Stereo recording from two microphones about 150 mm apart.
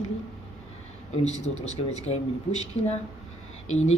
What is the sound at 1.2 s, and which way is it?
Speech, 50° left (ahead or behind).